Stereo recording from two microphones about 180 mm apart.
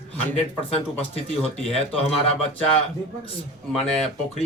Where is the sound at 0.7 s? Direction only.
35° left (ahead or behind).